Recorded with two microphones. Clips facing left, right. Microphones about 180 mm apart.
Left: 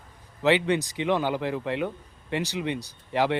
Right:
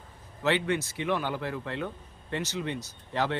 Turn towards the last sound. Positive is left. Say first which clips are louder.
# left 5 dB
turn(degrees=15)  # may be behind; listen again after turning